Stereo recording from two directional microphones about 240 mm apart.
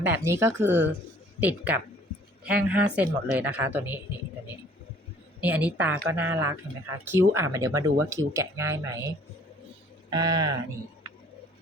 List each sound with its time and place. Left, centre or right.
0.0 s speech: centre
5.4 s speech: centre